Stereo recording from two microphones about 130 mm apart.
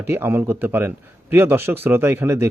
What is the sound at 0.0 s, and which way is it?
A man's voice, 20° right (ahead or behind).